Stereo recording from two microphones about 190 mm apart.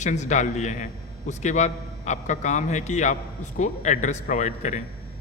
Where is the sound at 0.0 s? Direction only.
40° left (ahead or behind).